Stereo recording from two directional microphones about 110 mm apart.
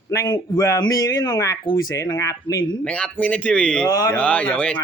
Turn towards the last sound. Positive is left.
turn(degrees=10)  # may be behind; listen again after turning